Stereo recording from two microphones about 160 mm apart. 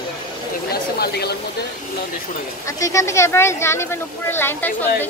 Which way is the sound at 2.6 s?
20° left (ahead or behind).